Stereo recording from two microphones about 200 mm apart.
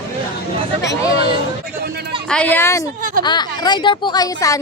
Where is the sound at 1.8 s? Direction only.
55° right (ahead or behind).